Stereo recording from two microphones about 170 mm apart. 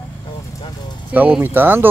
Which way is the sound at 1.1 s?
10° right (ahead or behind).